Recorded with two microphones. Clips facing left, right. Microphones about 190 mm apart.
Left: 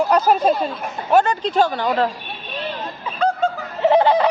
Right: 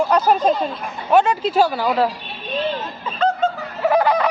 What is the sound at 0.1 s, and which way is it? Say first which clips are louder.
Speech: even; 10° left (ahead or behind).